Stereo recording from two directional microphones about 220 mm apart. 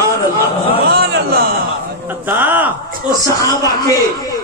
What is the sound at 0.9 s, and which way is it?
Speech, 45° right (ahead or behind).